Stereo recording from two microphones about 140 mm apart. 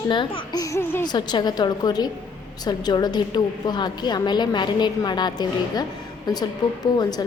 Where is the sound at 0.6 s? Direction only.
20° left (ahead or behind).